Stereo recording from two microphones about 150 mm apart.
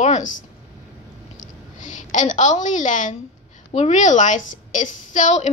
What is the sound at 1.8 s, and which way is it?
A woman's voice, 55° left (ahead or behind).